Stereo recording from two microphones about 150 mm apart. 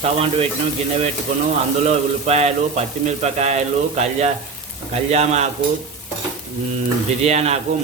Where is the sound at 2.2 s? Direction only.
45° right (ahead or behind).